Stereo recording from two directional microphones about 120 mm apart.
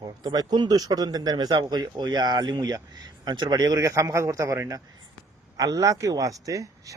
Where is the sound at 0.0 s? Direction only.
35° right (ahead or behind).